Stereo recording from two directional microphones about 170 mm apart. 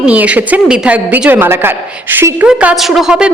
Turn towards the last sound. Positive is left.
turn(degrees=-5)  # may be behind; listen again after turning